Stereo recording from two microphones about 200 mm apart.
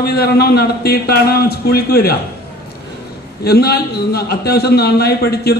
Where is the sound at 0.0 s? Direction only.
50° left (ahead or behind).